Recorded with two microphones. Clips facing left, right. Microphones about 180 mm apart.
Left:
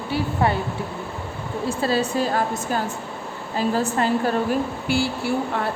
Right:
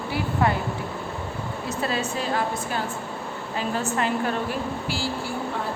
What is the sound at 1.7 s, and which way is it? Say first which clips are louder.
A woman's voice: left 5 dB; 30° left (ahead or behind).